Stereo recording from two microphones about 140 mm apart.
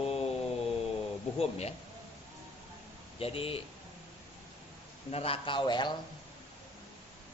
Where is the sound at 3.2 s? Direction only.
45° left (ahead or behind).